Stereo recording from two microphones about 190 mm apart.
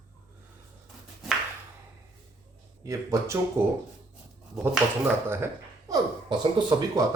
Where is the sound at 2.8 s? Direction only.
15° right (ahead or behind).